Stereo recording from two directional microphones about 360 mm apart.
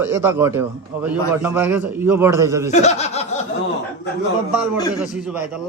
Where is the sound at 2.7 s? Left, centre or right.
Centre.